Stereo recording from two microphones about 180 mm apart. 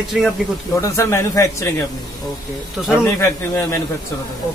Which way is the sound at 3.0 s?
15° left (ahead or behind).